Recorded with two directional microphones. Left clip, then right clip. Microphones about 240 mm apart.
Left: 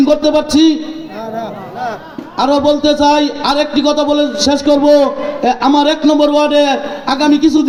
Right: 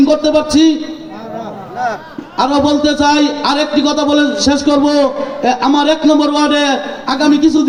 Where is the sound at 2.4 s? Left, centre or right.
Left.